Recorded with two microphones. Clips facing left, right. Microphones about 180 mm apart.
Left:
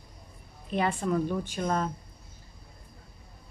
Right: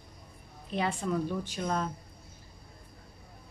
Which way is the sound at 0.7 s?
55° left (ahead or behind).